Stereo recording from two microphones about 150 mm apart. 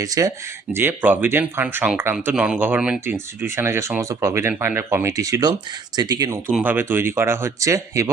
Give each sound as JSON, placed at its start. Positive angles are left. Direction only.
{"t": 0.0, "sound": "speech", "side_deg": -25}
{"t": 6.6, "sound": "speech", "side_deg": -15}